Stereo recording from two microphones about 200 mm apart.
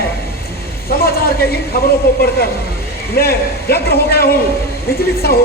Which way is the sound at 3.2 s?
50° left (ahead or behind).